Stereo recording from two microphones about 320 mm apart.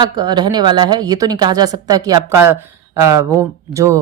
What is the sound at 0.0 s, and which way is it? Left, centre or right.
A woman's voice, centre.